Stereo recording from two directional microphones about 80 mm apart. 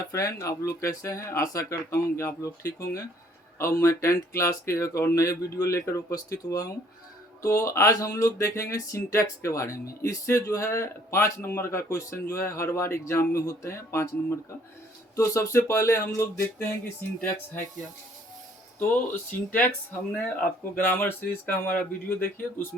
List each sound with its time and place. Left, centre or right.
0.1 s speech: left
17.2 s speech: left
18.8 s speech: left